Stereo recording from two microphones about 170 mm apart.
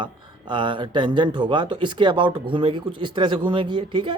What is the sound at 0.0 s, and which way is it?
A man's voice, 30° right (ahead or behind).